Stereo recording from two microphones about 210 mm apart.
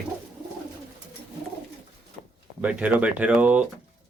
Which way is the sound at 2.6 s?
5° right (ahead or behind).